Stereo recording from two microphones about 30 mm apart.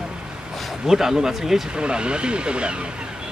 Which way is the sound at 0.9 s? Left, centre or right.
Centre.